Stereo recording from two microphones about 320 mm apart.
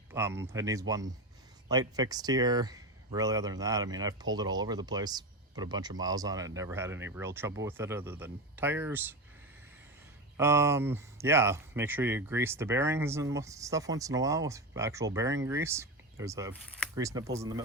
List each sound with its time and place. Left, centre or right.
0.1 s speech: centre
10.3 s speech: centre